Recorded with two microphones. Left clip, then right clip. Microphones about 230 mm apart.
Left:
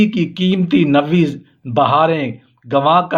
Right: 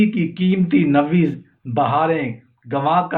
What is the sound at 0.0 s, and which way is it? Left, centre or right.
Speech, left.